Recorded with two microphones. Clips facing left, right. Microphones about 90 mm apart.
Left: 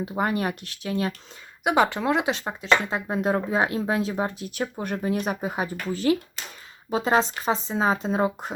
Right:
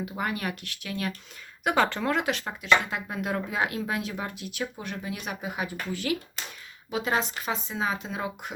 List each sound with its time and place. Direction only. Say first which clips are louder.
0.0 s speech: left 6 dB; 30° left (ahead or behind)
1.6 s speech: left 3 dB; 15° left (ahead or behind); by 8.5 s 35° left (ahead or behind)